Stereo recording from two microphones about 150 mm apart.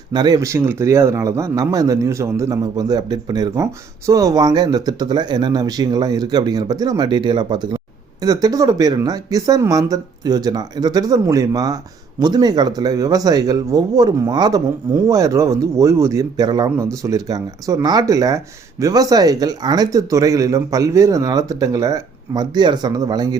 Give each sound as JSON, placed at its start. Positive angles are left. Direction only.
{"t": 0.1, "sound": "a man's voice", "side_deg": -30}